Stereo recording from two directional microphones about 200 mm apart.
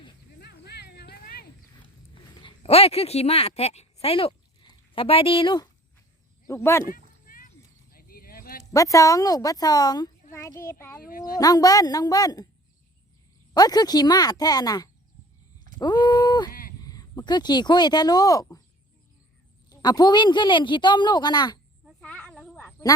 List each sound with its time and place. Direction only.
0.3 s a sound: 55° left (ahead or behind)
2.4 s speech: 30° left (ahead or behind)
6.5 s a woman's voice: 15° left (ahead or behind)
6.8 s a sound: 45° left (ahead or behind)
8.7 s a woman's voice: 15° left (ahead or behind)
11.0 s speech: 45° left (ahead or behind)
11.3 s a woman's voice: 20° left (ahead or behind)
13.5 s a woman's voice: 20° left (ahead or behind)
15.8 s a sound: 20° left (ahead or behind)
16.8 s speech: 20° left (ahead or behind)
19.7 s a woman's voice: 20° left (ahead or behind)
21.8 s a sound: 5° left (ahead or behind)